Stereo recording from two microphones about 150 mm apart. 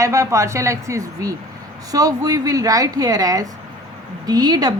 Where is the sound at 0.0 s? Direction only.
20° right (ahead or behind).